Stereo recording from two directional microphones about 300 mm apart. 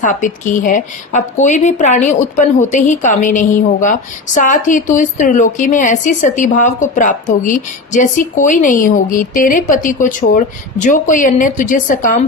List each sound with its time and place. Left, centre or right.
0.0 s a woman's voice: left